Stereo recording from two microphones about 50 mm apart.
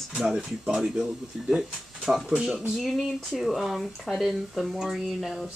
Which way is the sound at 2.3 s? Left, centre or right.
Centre.